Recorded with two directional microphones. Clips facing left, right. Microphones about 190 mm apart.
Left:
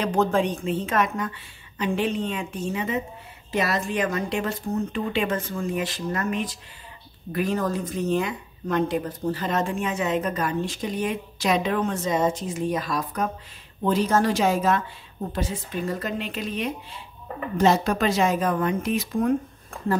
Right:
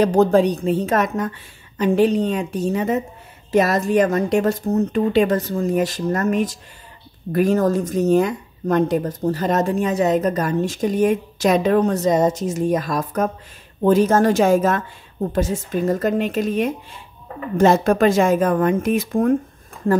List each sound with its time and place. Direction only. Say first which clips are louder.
0.0 s a woman's voice: right 8 dB; 35° right (ahead or behind)